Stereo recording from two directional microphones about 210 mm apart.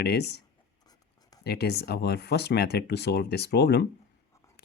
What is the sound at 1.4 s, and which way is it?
Speech, 50° left (ahead or behind).